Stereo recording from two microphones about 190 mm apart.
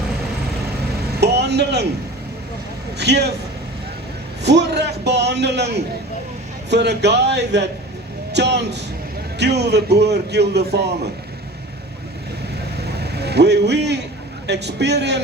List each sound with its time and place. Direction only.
1.2 s a sound: 60° right (ahead or behind)
3.0 s a man's voice: 60° right (ahead or behind)
4.4 s a man's voice: 65° right (ahead or behind)
12.8 s vehicle: 60° right (ahead or behind)
14.4 s a man's voice: 65° right (ahead or behind)